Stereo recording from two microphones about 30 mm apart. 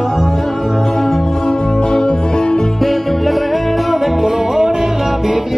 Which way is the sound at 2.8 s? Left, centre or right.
Centre.